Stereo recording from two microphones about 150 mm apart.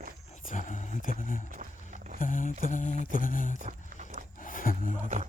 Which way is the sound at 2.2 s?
60° left (ahead or behind).